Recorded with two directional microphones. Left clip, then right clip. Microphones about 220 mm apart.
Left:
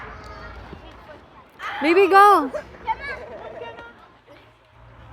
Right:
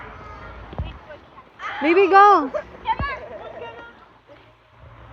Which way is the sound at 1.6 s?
50° left (ahead or behind).